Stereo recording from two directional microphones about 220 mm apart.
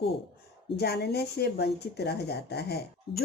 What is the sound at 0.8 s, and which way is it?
Speech, 45° left (ahead or behind).